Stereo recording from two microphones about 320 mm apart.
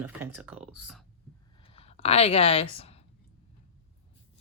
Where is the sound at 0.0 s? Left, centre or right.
Centre.